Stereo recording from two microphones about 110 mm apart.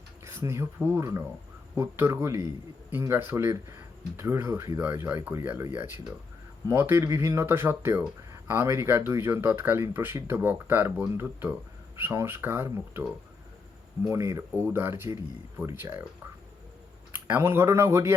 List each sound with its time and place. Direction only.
0.3 s speech: 25° right (ahead or behind)
14.1 s speech: 25° right (ahead or behind)
17.1 s speech: 15° right (ahead or behind)